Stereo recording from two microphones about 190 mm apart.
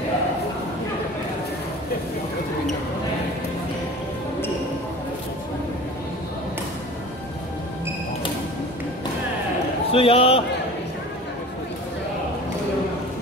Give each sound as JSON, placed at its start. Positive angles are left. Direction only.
{"t": 9.9, "sound": "a man's voice", "side_deg": 30}